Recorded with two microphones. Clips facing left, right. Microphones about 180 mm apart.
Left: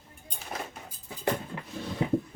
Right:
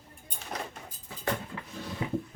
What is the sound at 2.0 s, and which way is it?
Music, 30° left (ahead or behind).